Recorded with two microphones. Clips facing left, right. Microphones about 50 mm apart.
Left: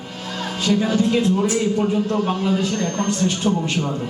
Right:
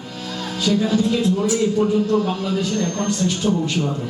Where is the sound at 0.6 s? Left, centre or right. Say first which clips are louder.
Even; left.